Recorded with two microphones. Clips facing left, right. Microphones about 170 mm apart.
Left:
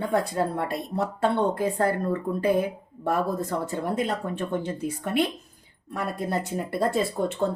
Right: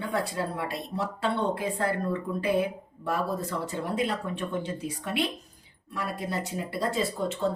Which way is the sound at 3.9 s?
45° left (ahead or behind).